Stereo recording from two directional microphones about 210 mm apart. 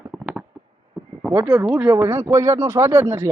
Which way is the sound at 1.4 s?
10° right (ahead or behind).